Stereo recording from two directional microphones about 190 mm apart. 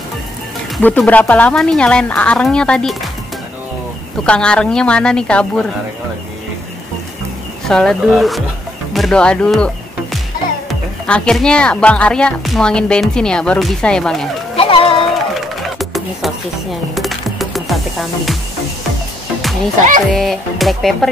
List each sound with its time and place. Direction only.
0.7 s speech: 5° left (ahead or behind)
4.3 s speech: 5° left (ahead or behind)
7.6 s speech: centre (ahead or behind)
10.7 s speech: 5° left (ahead or behind)
14.6 s a sound: 30° left (ahead or behind)
15.3 s music: centre (ahead or behind)
20.1 s speech: centre (ahead or behind)